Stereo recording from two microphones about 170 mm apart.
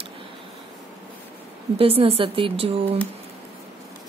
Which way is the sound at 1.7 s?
35° right (ahead or behind).